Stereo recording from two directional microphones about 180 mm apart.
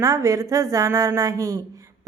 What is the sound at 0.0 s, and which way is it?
Speech, 20° right (ahead or behind).